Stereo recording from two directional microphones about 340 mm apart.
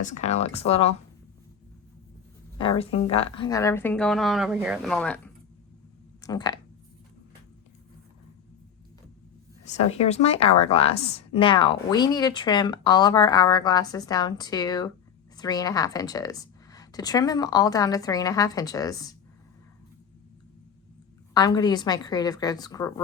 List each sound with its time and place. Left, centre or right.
0.0 s speech: left
2.6 s a woman's voice: centre
9.7 s a woman's voice: centre
21.3 s a woman's voice: centre